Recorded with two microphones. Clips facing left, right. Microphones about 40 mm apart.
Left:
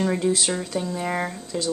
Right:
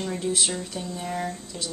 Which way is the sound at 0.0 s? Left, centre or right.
Left.